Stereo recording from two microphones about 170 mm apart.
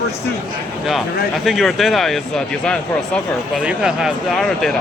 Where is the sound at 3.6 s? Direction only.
5° right (ahead or behind).